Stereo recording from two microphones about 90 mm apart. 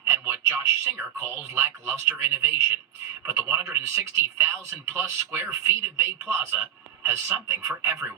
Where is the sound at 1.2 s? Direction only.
30° right (ahead or behind).